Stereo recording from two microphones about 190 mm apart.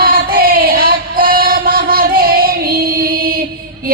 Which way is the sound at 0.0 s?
50° right (ahead or behind).